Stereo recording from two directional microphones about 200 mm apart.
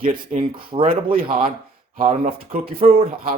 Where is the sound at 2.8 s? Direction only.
30° right (ahead or behind).